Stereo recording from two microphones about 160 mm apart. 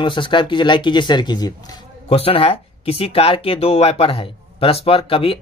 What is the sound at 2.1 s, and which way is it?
Speech, 35° left (ahead or behind).